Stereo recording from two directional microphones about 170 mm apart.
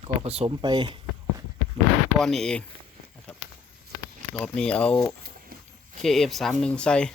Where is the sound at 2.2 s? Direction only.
Centre (ahead or behind).